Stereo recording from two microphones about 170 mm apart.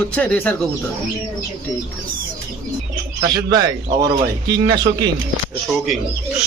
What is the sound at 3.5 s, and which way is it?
Speech, 20° right (ahead or behind).